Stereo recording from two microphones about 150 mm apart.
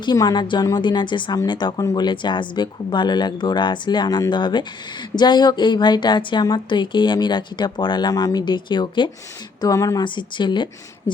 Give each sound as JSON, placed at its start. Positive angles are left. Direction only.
{"t": 0.0, "sound": "a woman's voice", "side_deg": 30}